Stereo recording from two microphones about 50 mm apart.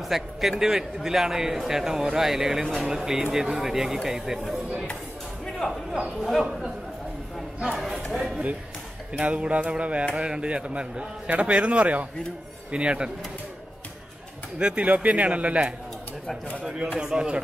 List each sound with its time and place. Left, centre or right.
0.1 s a man's voice: centre
6.1 s a man's voice: centre
9.2 s a man's voice: right
14.6 s a man's voice: right
16.6 s a man's voice: centre